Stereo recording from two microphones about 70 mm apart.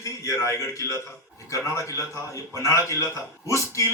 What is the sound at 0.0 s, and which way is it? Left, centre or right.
A man's voice, left.